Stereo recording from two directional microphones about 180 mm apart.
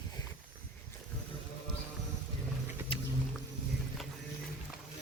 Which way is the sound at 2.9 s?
30° left (ahead or behind).